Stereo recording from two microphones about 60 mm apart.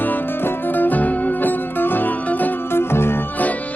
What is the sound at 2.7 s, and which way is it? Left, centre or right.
Music, left.